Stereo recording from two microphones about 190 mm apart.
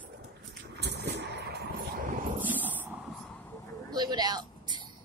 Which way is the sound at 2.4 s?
10° right (ahead or behind).